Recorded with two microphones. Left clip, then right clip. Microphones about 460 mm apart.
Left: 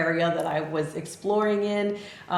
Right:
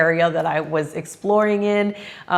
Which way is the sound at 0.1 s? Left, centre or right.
Right.